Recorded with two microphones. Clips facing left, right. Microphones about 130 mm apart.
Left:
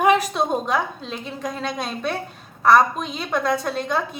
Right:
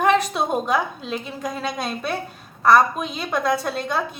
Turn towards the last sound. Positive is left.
turn(degrees=0)  # may be behind; listen again after turning